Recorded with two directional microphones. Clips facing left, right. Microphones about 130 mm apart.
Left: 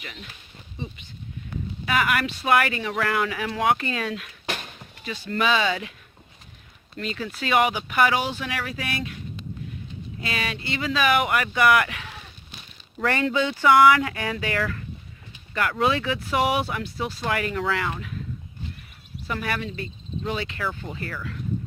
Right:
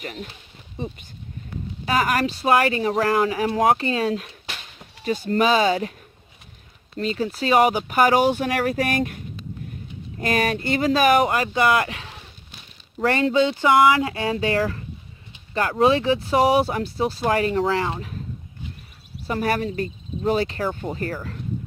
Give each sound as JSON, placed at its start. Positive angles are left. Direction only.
{"t": 0.0, "sound": "speech", "side_deg": -45}
{"t": 1.8, "sound": "speech", "side_deg": -35}
{"t": 6.9, "sound": "speech", "side_deg": -35}
{"t": 13.2, "sound": "speech", "side_deg": -25}
{"t": 19.3, "sound": "speech", "side_deg": -40}